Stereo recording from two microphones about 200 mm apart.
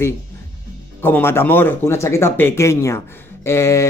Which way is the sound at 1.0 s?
10° left (ahead or behind).